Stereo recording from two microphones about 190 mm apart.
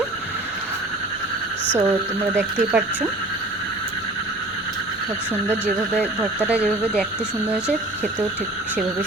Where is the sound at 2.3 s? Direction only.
10° right (ahead or behind).